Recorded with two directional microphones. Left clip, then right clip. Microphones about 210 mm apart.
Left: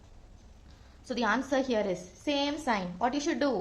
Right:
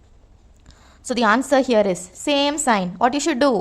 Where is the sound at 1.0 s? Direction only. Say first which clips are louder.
Right 12 dB; 50° right (ahead or behind).